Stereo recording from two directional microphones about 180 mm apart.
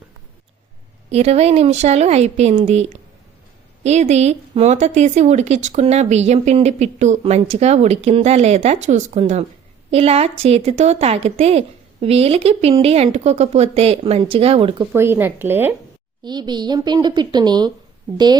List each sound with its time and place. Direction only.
1.1 s speech: 35° right (ahead or behind)
14.9 s speech: 15° right (ahead or behind)
16.2 s a woman's voice: 25° right (ahead or behind)